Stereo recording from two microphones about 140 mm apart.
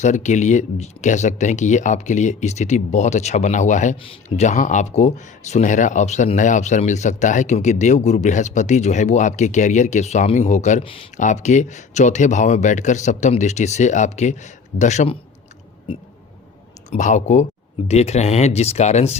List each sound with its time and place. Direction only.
0.0 s speech: 55° left (ahead or behind)
10.8 s speech: 40° left (ahead or behind)
11.2 s speech: 60° left (ahead or behind)
16.9 s speech: 60° left (ahead or behind)